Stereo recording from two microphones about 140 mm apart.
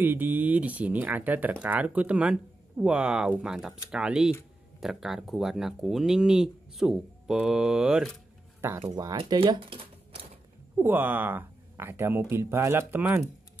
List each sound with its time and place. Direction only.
0.0 s speech: 15° right (ahead or behind)
8.5 s speech: 20° right (ahead or behind)
9.3 s speech: 35° right (ahead or behind)
10.8 s speech: 15° right (ahead or behind)